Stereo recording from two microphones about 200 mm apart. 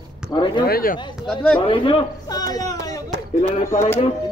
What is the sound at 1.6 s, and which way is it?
A man's voice, 25° left (ahead or behind).